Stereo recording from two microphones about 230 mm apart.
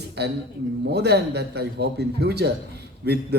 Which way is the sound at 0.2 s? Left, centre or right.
Right.